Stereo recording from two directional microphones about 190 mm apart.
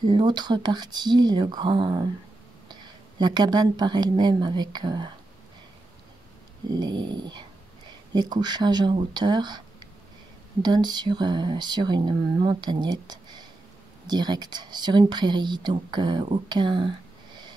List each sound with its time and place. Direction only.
0.0 s speech: 25° right (ahead or behind)
6.7 s speech: 20° right (ahead or behind)